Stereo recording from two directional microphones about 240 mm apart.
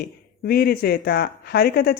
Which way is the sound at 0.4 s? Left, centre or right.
Left.